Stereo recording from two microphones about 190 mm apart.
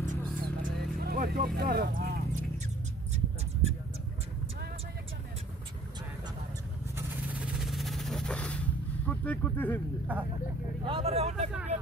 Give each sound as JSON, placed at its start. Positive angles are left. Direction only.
{"t": 0.0, "sound": "vehicle", "side_deg": -45}
{"t": 7.0, "sound": "vehicle", "side_deg": -5}
{"t": 9.0, "sound": "speech", "side_deg": 10}
{"t": 10.1, "sound": "speech", "side_deg": -10}
{"t": 10.8, "sound": "speech", "side_deg": -30}